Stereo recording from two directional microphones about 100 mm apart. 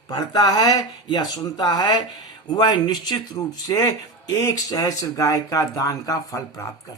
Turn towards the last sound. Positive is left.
turn(degrees=30)  # may be behind; listen again after turning